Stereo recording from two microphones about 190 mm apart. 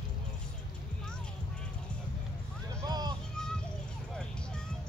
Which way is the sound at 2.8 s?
20° right (ahead or behind).